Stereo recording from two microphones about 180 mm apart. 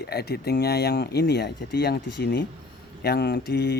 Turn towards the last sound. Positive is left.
turn(degrees=65)  # may be behind; listen again after turning